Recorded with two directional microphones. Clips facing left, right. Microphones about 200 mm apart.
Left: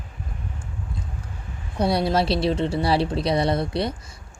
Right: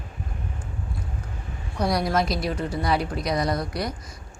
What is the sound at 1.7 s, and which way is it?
A woman's voice, 30° left (ahead or behind).